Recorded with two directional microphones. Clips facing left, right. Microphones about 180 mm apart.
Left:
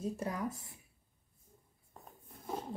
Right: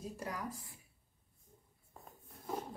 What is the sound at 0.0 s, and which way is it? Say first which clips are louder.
Speech: left 6 dB; 25° left (ahead or behind).